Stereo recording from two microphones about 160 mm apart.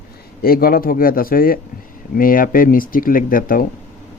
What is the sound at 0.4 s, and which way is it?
Speech, 65° left (ahead or behind).